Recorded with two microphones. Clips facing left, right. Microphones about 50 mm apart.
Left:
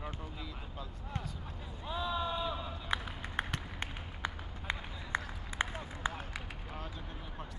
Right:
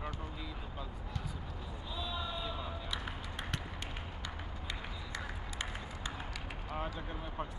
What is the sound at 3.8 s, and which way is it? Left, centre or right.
Run, left.